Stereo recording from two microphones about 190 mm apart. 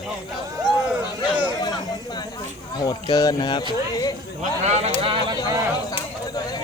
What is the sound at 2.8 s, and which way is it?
Speech, 20° left (ahead or behind).